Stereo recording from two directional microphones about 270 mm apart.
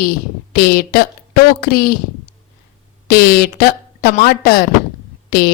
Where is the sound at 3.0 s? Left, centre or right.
Left.